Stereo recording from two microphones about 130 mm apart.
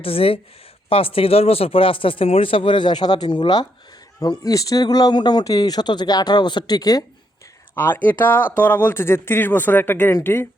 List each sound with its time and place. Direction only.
0.0 s speech: 45° left (ahead or behind); by 7.0 s 30° left (ahead or behind)
7.8 s speech: 15° left (ahead or behind)